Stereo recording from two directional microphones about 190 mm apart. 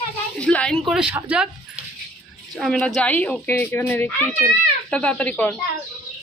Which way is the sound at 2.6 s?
5° left (ahead or behind).